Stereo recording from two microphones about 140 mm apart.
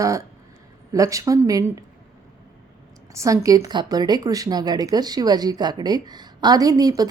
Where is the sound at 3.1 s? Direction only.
20° right (ahead or behind).